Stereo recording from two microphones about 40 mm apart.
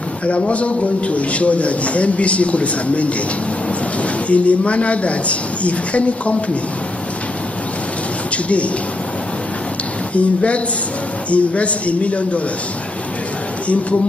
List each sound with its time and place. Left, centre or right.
0.3 s a man's voice: left
4.3 s a man's voice: left
10.1 s a man's voice: left